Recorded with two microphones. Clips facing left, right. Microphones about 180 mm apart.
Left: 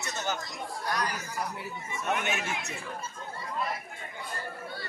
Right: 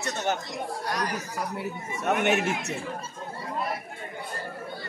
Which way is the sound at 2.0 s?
60° right (ahead or behind).